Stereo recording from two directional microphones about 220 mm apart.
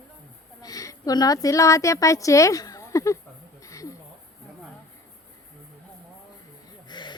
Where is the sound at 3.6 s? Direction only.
15° left (ahead or behind).